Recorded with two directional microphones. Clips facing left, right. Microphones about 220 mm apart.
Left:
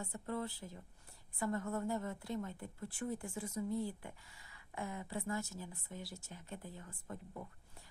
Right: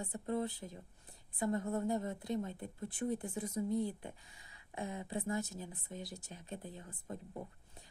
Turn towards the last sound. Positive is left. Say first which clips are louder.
# right 3 dB
turn(degrees=-25)  # may be behind; listen again after turning